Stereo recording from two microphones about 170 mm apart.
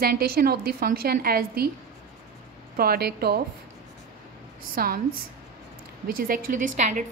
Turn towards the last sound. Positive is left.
turn(degrees=-45)  # may be behind; listen again after turning